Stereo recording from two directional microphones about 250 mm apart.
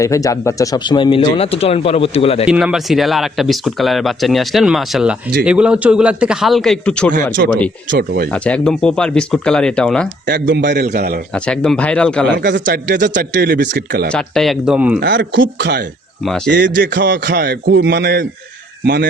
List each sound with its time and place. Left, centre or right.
0.0 s speech: centre
2.5 s speech: centre
7.9 s a man's voice: right
8.3 s speech: centre
10.2 s a man's voice: right
11.3 s speech: centre
12.4 s a man's voice: right
14.1 s speech: centre
15.0 s a man's voice: right